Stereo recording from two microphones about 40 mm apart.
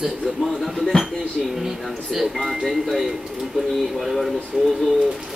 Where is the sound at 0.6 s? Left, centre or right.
Centre.